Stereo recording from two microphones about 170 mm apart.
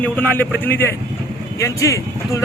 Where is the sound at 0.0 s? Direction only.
10° left (ahead or behind).